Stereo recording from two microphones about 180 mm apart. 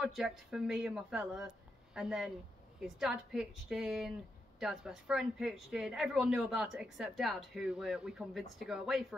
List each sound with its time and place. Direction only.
0.0 s speech: 5° right (ahead or behind)